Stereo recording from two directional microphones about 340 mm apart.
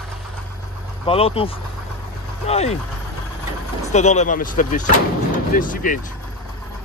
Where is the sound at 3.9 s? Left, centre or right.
Centre.